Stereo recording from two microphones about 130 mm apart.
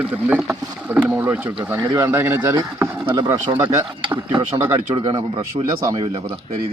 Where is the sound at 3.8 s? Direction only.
40° right (ahead or behind).